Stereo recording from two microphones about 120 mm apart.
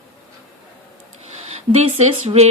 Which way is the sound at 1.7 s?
65° right (ahead or behind).